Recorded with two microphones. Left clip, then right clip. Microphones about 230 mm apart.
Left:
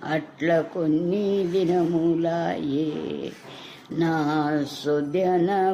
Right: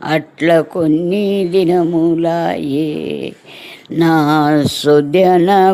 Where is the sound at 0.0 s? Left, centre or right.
Right.